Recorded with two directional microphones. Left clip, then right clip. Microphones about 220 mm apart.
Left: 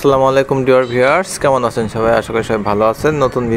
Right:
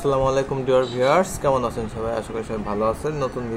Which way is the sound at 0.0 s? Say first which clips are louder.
Left 9 dB; 25° left (ahead or behind).